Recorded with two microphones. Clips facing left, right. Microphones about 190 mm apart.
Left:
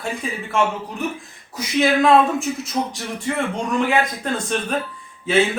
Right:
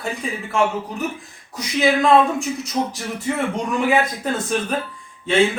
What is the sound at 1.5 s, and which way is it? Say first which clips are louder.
Speech: left 1 dB; centre (ahead or behind).